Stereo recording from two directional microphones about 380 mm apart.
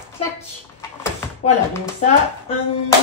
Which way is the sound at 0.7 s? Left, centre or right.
Centre.